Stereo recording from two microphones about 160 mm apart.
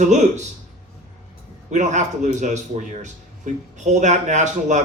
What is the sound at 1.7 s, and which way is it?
Speech, 50° right (ahead or behind).